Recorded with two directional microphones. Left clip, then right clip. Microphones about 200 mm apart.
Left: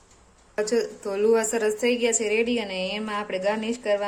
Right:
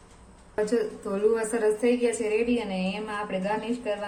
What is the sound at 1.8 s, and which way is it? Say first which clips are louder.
A woman's voice: left 1 dB; 60° left (ahead or behind).